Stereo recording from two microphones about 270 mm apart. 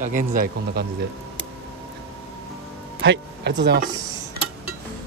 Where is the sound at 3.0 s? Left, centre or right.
Right.